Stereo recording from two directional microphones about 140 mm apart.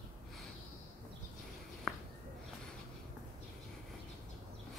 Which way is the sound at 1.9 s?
5° left (ahead or behind).